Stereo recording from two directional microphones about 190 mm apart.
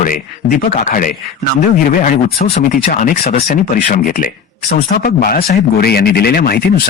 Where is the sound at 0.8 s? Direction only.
45° left (ahead or behind).